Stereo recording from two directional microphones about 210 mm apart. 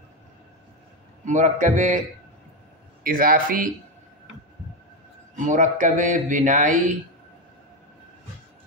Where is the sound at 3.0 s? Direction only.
45° right (ahead or behind).